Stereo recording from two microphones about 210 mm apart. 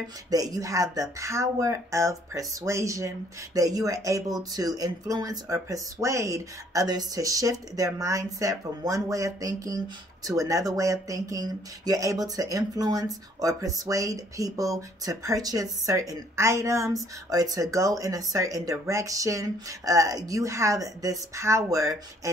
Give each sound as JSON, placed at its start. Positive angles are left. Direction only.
{"t": 0.3, "sound": "speech", "side_deg": -15}